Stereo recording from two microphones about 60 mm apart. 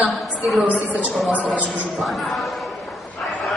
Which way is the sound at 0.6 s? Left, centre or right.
Right.